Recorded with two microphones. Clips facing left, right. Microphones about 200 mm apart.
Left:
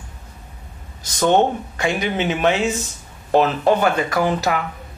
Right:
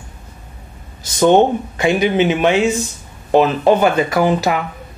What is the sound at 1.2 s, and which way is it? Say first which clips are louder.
Speech: right 5 dB; 20° right (ahead or behind).